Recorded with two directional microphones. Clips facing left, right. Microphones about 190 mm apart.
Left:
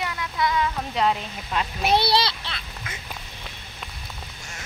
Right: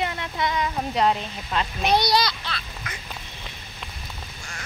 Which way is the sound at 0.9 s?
Centre (ahead or behind).